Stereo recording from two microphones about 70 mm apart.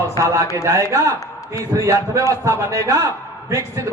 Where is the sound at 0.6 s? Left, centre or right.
Right.